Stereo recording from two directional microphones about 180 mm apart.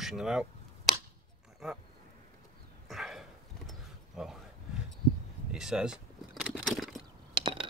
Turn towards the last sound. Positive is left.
turn(degrees=-30)  # may be behind; listen again after turning